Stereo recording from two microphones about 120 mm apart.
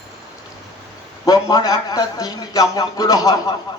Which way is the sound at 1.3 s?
30° left (ahead or behind).